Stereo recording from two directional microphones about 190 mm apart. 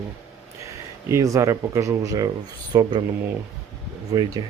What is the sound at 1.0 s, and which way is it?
Speech, 15° right (ahead or behind).